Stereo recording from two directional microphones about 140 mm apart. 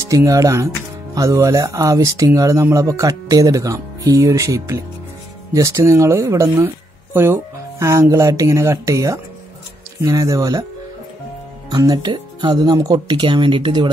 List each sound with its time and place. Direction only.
0.1 s speech: 25° right (ahead or behind)
11.7 s speech: 30° right (ahead or behind)